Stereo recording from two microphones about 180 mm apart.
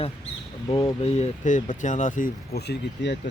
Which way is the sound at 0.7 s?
30° left (ahead or behind).